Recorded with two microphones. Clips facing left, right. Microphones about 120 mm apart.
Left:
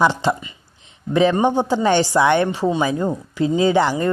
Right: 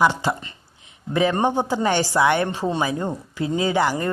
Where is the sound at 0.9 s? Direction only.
25° left (ahead or behind).